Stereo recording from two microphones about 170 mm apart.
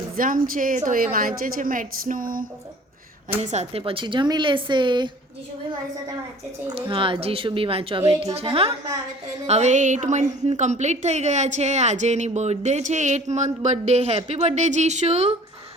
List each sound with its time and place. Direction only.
0.2 s a woman's voice: 55° right (ahead or behind)
3.4 s speech: 40° right (ahead or behind)
6.7 s a woman's voice: 30° right (ahead or behind)